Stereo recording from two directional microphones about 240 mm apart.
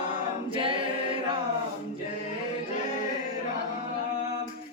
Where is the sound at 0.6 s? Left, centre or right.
Right.